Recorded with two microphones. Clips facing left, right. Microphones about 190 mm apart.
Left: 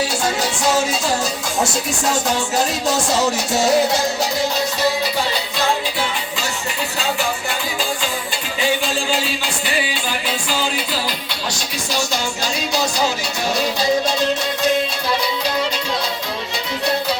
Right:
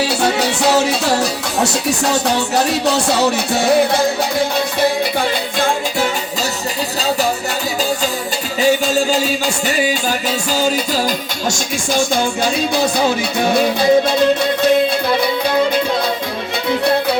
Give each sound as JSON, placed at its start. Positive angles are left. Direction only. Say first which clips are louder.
{"t": 0.0, "sound": "music", "louder": "right 4 dB", "side_deg": -65}
{"t": 5.5, "sound": "music", "louder": "right 3 dB", "side_deg": -50}
{"t": 8.6, "sound": "music", "louder": "right 6 dB", "side_deg": -40}